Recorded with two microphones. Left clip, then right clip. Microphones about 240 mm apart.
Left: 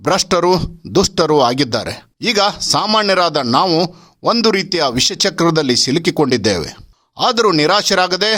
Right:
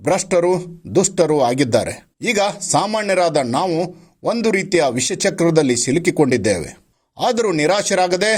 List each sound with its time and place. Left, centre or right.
0.0 s speech: centre